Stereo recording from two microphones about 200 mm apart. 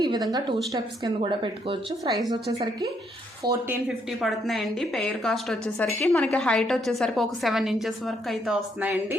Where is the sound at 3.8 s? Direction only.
Centre (ahead or behind).